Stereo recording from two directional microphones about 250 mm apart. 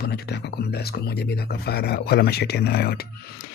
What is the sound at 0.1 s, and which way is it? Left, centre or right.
Speech, left.